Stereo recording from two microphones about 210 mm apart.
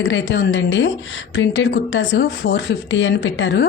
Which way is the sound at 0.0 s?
60° left (ahead or behind).